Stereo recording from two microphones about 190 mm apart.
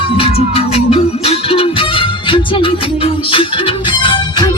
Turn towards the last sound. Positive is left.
turn(degrees=25)  # may be behind; listen again after turning